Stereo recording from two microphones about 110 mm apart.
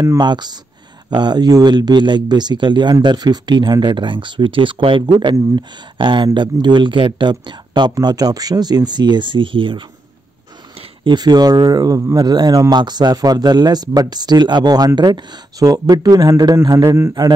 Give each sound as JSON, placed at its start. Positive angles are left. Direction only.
{"t": 0.2, "sound": "a man's voice", "side_deg": -40}